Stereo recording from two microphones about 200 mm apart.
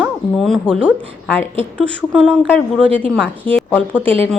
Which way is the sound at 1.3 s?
10° left (ahead or behind).